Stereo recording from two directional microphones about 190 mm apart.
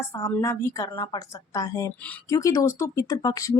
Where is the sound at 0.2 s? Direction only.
15° left (ahead or behind).